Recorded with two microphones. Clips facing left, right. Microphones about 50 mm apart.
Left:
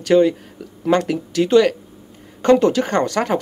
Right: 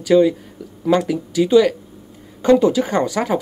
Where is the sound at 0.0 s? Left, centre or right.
Left.